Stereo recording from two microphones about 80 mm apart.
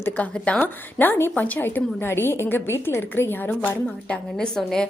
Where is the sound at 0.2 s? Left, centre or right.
Centre.